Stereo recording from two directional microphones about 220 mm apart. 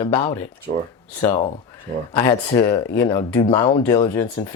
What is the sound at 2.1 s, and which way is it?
Speech, 20° left (ahead or behind).